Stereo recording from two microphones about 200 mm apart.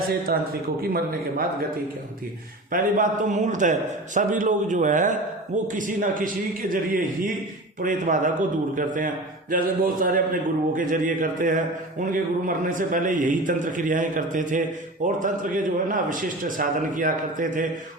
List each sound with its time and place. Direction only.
0.3 s a man's voice: 50° right (ahead or behind)
2.7 s a man's voice: 40° right (ahead or behind)